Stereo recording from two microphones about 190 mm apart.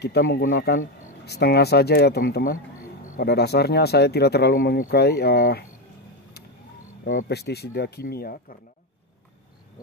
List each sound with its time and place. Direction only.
0.0 s speech: 60° left (ahead or behind)
7.1 s speech: 50° left (ahead or behind)